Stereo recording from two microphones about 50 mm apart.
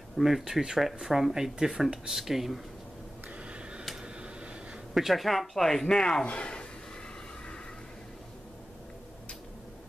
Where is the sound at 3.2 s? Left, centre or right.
Right.